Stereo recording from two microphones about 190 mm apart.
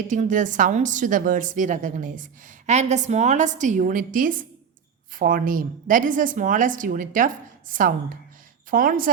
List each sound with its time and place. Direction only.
0.1 s a woman's voice: 40° right (ahead or behind)